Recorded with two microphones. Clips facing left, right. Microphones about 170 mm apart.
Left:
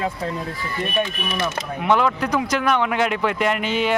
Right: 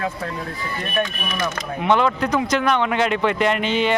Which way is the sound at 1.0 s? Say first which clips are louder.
Right 1 dB; 25° left (ahead or behind).